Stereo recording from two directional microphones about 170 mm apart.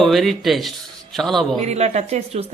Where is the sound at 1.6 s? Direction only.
40° right (ahead or behind).